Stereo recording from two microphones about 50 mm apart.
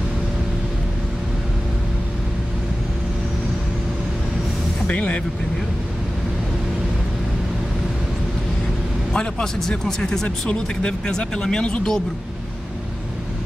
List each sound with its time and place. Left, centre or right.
4.8 s speech: left
9.1 s speech: centre
10.2 s speech: left